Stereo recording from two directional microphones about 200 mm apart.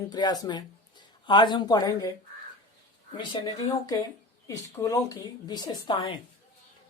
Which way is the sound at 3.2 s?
20° left (ahead or behind).